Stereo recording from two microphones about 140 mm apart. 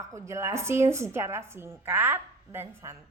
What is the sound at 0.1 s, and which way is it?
A woman's voice, 20° right (ahead or behind).